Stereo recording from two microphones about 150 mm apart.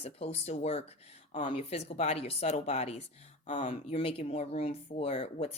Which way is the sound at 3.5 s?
55° left (ahead or behind).